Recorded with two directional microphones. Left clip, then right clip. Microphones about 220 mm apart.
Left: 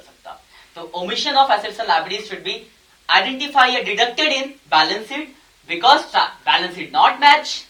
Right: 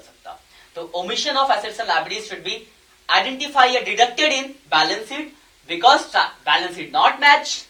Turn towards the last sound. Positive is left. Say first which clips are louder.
# left 2 dB
turn(degrees=30)  # may be behind; listen again after turning